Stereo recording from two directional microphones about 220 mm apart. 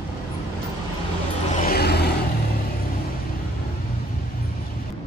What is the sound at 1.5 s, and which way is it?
Vehicle, 40° left (ahead or behind).